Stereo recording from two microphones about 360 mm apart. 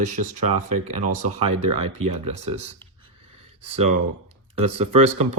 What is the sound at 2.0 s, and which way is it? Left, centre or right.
Speech, centre.